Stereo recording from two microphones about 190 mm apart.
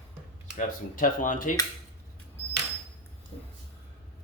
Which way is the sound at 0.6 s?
45° left (ahead or behind).